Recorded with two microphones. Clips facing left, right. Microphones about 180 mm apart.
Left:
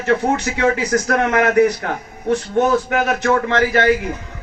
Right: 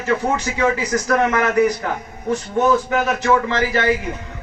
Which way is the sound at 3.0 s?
60° left (ahead or behind).